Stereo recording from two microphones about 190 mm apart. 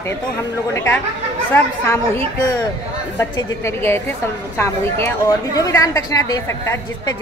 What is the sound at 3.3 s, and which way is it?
A woman's voice, 15° left (ahead or behind).